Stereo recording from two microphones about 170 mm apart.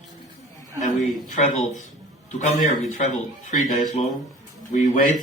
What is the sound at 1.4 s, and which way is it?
Speech, 45° left (ahead or behind).